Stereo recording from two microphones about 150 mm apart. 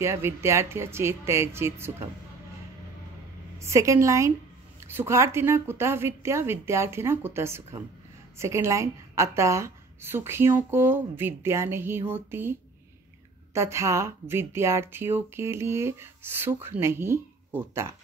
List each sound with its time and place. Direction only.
0.0 s a woman's voice: 20° right (ahead or behind)
3.5 s a woman's voice: 20° right (ahead or behind)